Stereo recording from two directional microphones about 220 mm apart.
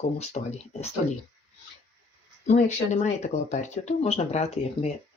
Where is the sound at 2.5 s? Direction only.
30° left (ahead or behind).